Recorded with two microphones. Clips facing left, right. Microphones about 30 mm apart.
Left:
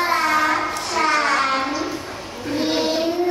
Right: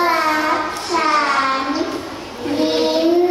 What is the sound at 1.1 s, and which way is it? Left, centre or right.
Child singing, right.